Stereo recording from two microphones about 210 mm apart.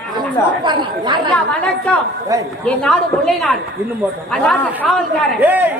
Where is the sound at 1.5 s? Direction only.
5° left (ahead or behind).